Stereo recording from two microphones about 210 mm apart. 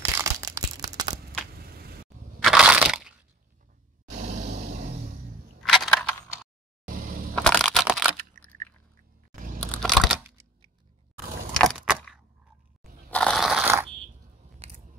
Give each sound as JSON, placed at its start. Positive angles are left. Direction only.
{"t": 0.0, "sound": "crushing", "side_deg": -15}
{"t": 2.4, "sound": "crushing", "side_deg": -5}
{"t": 5.6, "sound": "crushing", "side_deg": 0}
{"t": 7.0, "sound": "a sound", "side_deg": -45}
{"t": 7.3, "sound": "crushing", "side_deg": 5}
{"t": 8.6, "sound": "chewing", "side_deg": -40}
{"t": 9.6, "sound": "a sound", "side_deg": 5}
{"t": 11.5, "sound": "a sound", "side_deg": 0}
{"t": 13.1, "sound": "crushing", "side_deg": 5}